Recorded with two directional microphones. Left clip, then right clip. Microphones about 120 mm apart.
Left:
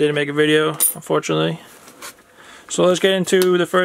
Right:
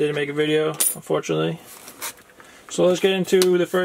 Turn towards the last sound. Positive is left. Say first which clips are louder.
# left 2 dB
turn(degrees=55)  # may be behind; listen again after turning